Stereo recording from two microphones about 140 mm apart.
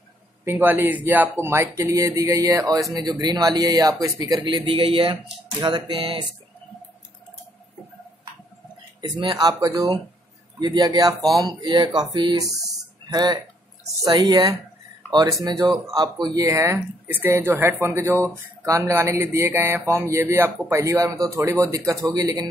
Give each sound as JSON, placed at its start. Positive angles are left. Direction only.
{"t": 0.5, "sound": "a man's voice", "side_deg": -15}
{"t": 9.0, "sound": "speech", "side_deg": -30}
{"t": 11.1, "sound": "speech", "side_deg": 0}
{"t": 11.4, "sound": "speech", "side_deg": -35}